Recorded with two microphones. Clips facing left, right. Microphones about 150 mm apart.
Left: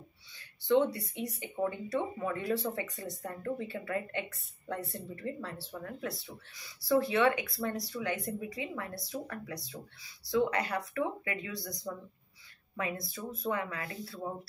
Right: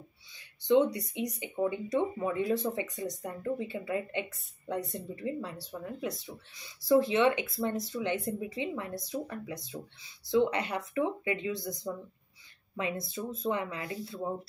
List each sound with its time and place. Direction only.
0.9 s speech: 15° right (ahead or behind)